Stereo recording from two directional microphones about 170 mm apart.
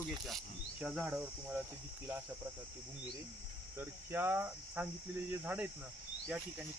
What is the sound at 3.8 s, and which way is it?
Cricket, 10° right (ahead or behind).